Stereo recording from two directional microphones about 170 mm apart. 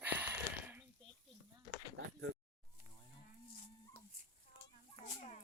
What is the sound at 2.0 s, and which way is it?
Speech, 90° right.